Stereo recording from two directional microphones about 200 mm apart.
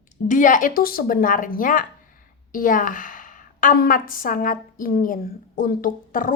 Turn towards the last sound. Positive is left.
turn(degrees=45)  # may be behind; listen again after turning